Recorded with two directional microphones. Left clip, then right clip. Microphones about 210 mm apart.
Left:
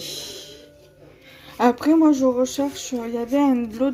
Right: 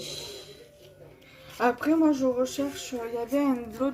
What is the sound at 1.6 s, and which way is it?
Speech, 45° left (ahead or behind).